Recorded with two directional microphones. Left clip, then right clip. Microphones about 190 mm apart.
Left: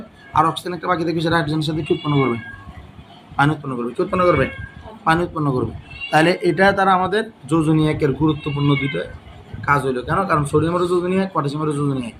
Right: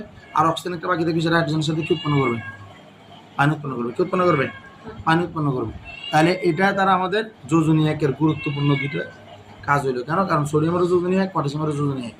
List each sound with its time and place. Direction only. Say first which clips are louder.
0.3 s speech: left 2 dB; 30° left (ahead or behind)
3.3 s speech: left 2 dB; 25° left (ahead or behind)